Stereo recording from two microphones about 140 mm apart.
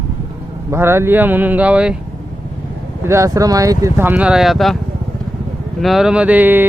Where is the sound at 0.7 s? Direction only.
15° right (ahead or behind).